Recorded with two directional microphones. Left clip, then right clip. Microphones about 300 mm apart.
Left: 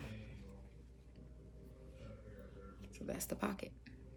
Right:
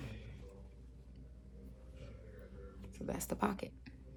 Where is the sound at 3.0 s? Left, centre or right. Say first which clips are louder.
Right 4 dB; centre.